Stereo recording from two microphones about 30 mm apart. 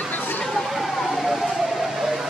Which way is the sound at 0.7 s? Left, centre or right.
Centre.